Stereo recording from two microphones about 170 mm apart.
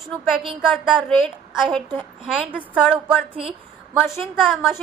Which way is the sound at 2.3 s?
10° right (ahead or behind).